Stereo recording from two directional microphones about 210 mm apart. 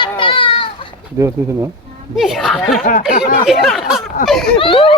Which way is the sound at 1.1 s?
15° right (ahead or behind).